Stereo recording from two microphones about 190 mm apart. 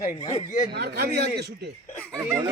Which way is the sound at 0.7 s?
60° right (ahead or behind).